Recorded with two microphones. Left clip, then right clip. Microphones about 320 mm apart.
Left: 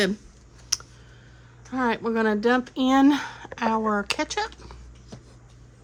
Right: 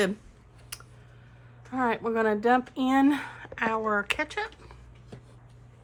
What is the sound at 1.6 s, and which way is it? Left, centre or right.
Speech, centre.